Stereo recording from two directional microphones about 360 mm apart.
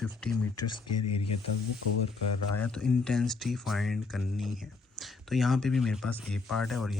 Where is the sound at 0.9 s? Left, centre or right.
Left.